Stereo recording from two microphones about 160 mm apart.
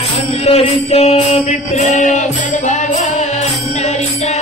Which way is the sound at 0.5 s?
40° left (ahead or behind).